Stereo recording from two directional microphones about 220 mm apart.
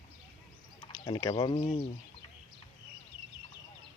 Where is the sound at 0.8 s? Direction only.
20° left (ahead or behind).